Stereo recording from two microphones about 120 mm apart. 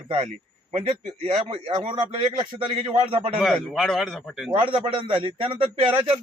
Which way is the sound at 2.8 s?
50° right (ahead or behind).